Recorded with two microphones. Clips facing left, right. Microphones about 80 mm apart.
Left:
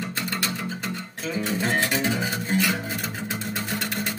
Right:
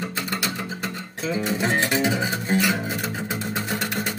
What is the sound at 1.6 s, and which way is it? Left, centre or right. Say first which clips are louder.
Music: right 2 dB; centre.